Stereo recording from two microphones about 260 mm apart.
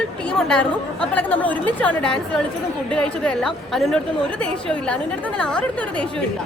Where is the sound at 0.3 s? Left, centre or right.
Centre.